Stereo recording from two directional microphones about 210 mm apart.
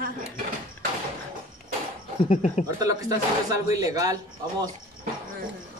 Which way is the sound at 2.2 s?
35° left (ahead or behind).